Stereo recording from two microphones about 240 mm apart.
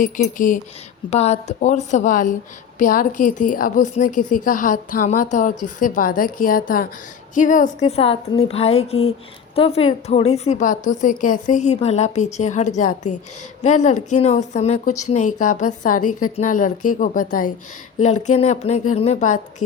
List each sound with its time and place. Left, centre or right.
0.0 s a woman's voice: left